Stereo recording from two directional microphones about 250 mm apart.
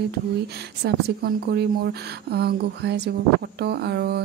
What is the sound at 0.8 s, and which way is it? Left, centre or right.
Speech, right.